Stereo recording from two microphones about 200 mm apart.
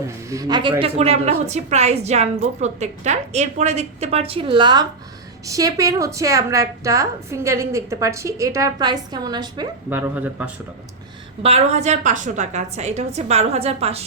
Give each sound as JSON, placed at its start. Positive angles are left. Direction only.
{"t": 0.3, "sound": "a woman's voice", "side_deg": -20}
{"t": 9.9, "sound": "a woman's voice", "side_deg": -10}
{"t": 11.4, "sound": "a woman's voice", "side_deg": -30}